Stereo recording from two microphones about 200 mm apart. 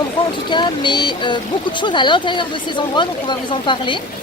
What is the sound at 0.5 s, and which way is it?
Speech, 25° left (ahead or behind).